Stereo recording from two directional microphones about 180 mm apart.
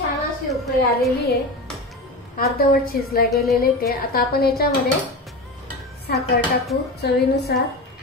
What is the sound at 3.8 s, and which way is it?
Speech, 60° left (ahead or behind).